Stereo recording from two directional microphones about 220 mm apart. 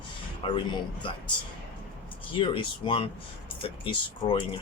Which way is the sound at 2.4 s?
25° left (ahead or behind).